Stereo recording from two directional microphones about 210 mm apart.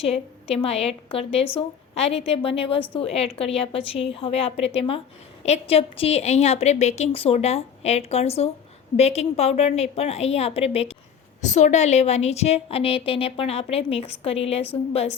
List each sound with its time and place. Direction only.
0.0 s a woman's voice: 30° left (ahead or behind)